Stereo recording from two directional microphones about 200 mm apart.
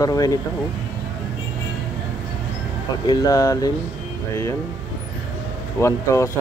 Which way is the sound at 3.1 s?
20° left (ahead or behind).